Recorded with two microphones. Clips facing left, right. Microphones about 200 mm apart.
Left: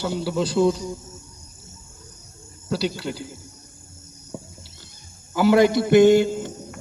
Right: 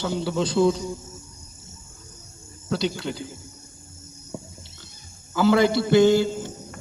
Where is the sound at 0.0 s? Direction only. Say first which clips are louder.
Left 1 dB; 5° left (ahead or behind).